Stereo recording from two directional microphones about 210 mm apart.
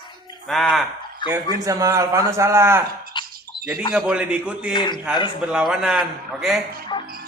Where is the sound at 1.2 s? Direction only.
20° left (ahead or behind).